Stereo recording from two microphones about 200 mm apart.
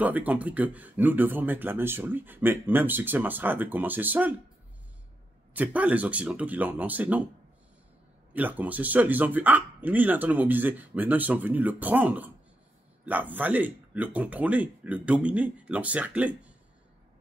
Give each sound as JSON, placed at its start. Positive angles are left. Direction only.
{"t": 0.0, "sound": "speech", "side_deg": -10}
{"t": 5.5, "sound": "speech", "side_deg": -10}
{"t": 8.3, "sound": "speech", "side_deg": -10}